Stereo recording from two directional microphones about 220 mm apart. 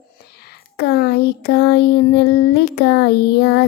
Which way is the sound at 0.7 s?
45° left (ahead or behind).